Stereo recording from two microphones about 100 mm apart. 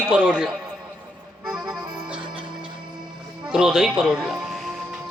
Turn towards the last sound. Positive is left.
turn(degrees=-5)  # may be behind; listen again after turning